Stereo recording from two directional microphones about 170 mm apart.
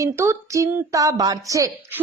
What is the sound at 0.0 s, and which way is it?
A woman's voice, 15° right (ahead or behind).